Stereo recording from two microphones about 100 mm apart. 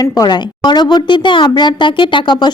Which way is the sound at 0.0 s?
40° left (ahead or behind).